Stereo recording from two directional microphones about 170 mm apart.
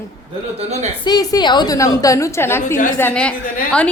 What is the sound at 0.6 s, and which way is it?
Speech, 40° right (ahead or behind).